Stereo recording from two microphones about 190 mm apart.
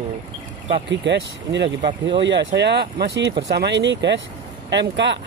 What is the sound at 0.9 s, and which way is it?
Speech, 65° right (ahead or behind).